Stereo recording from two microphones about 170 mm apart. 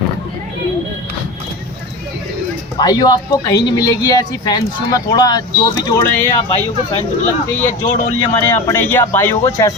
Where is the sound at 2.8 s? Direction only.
25° left (ahead or behind).